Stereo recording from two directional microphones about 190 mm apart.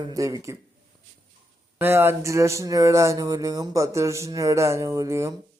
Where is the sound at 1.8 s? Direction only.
10° right (ahead or behind).